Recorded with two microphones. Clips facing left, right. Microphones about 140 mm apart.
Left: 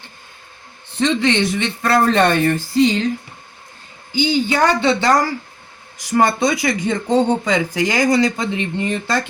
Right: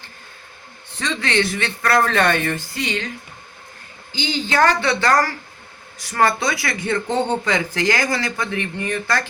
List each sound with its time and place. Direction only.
0.9 s speech: 20° left (ahead or behind)
4.1 s speech: 10° left (ahead or behind)